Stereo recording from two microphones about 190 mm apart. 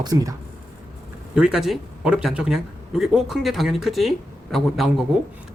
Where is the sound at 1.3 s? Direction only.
5° right (ahead or behind).